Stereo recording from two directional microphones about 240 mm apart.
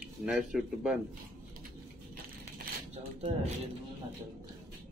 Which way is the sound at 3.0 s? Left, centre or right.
Right.